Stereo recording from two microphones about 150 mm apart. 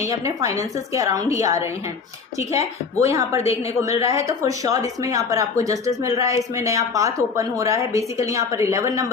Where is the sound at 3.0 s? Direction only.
20° right (ahead or behind).